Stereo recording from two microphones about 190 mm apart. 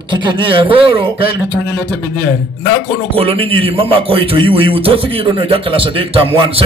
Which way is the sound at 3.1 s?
30° right (ahead or behind).